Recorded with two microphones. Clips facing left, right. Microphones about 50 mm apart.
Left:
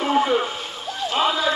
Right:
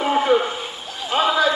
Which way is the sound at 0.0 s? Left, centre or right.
Centre.